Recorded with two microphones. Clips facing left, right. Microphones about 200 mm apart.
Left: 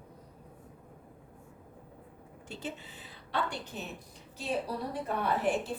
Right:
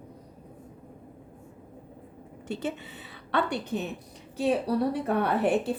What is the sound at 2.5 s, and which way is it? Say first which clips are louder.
A woman's voice: right 8 dB; 65° right (ahead or behind).